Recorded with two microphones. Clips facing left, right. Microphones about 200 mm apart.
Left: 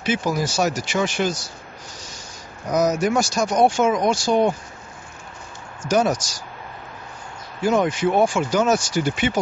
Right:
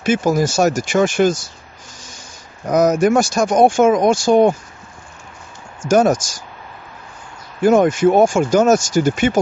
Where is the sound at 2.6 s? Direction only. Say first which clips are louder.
Right 6 dB; 55° right (ahead or behind).